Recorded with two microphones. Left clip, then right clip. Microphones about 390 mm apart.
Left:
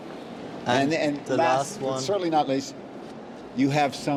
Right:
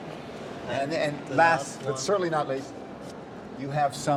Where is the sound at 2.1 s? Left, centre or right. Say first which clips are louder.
Right 2 dB; centre.